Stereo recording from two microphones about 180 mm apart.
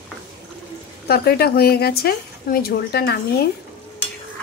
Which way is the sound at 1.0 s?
60° left (ahead or behind).